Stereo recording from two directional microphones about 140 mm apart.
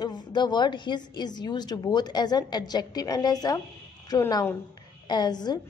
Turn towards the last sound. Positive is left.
turn(degrees=30)  # may be behind; listen again after turning